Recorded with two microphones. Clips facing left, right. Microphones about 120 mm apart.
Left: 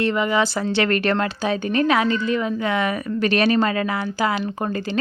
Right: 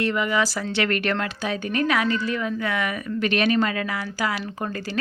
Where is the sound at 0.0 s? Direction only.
30° left (ahead or behind).